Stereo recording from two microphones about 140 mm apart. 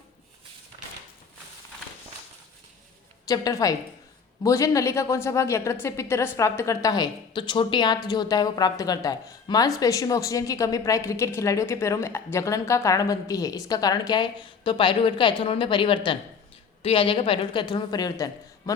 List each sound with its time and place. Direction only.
3.2 s a woman's voice: 25° left (ahead or behind)